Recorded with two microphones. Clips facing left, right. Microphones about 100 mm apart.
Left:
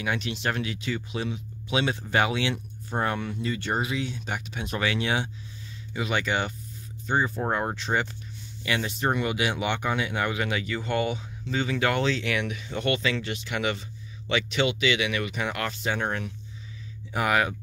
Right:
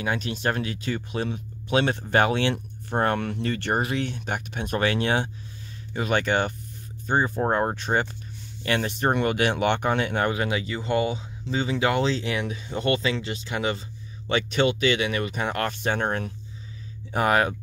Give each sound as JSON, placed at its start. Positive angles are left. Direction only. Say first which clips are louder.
{"t": 0.0, "sound": "speech", "louder": "right 2 dB", "side_deg": -35}
{"t": 7.2, "sound": "speech", "louder": "right 4 dB", "side_deg": -25}
{"t": 7.5, "sound": "speech", "louder": "right 2 dB", "side_deg": -45}